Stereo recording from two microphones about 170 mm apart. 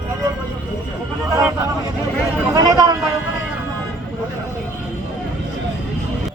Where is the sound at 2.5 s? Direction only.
20° right (ahead or behind).